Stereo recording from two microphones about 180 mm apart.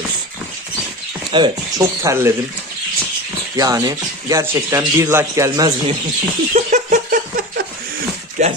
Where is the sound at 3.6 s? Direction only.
20° right (ahead or behind).